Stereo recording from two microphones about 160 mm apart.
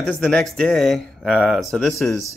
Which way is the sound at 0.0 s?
5° left (ahead or behind).